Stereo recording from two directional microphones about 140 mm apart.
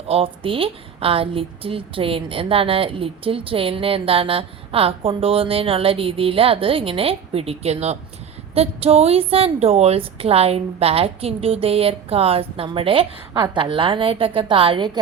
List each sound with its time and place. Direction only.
0.1 s a woman's voice: 40° right (ahead or behind)